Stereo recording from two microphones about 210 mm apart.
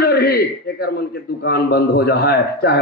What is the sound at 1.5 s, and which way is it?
A man's voice, 45° left (ahead or behind).